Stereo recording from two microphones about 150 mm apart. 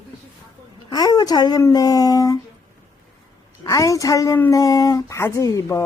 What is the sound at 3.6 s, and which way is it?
Speech, 25° left (ahead or behind).